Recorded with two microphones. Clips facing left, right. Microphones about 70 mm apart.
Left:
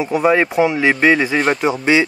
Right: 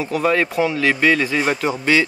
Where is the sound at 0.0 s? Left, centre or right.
Centre.